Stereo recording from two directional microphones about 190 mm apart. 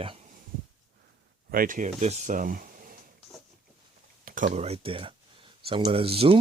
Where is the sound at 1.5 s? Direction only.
50° right (ahead or behind).